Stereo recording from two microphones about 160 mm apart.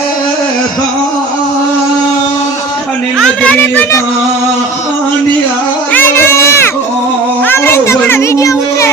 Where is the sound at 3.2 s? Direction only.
5° left (ahead or behind).